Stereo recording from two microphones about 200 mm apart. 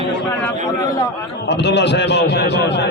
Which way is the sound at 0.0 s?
60° left (ahead or behind).